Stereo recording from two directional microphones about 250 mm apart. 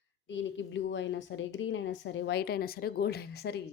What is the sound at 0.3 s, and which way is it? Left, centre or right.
A woman's voice, left.